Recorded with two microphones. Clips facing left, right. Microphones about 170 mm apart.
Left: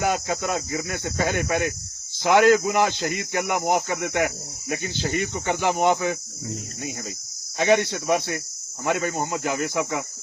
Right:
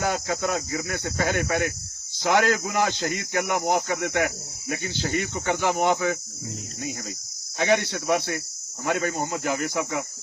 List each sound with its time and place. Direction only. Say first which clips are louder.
0.0 s speech: left 1 dB; 15° left (ahead or behind)
7.9 s speech: left 1 dB; 20° left (ahead or behind)